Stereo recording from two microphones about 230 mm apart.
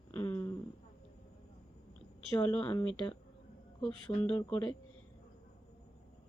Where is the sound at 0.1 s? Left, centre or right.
Centre.